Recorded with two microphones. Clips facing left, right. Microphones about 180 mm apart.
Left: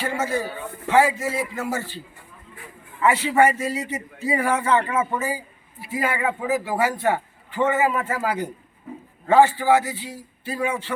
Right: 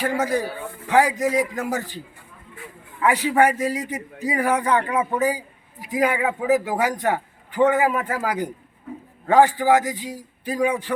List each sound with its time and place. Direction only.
0.0 s a man's voice: 15° right (ahead or behind)
3.1 s a man's voice: 15° right (ahead or behind)
6.1 s speech: centre (ahead or behind)
6.5 s a man's voice: 15° right (ahead or behind)